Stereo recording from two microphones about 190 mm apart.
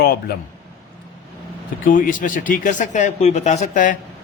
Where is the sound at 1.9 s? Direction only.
45° left (ahead or behind).